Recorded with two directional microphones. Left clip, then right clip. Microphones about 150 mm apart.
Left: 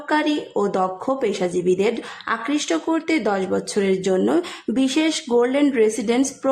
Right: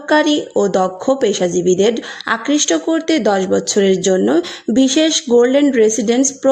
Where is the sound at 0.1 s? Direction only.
30° right (ahead or behind).